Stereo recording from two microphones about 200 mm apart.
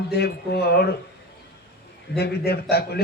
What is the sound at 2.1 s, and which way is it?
Speech, 55° left (ahead or behind).